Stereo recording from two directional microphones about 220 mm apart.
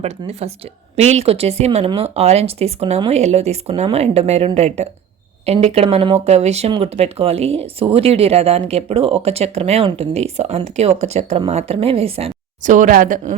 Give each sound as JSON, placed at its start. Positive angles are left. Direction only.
{"t": 0.0, "sound": "speech", "side_deg": -30}